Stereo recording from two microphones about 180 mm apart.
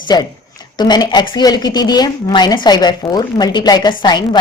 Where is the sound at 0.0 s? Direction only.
25° left (ahead or behind).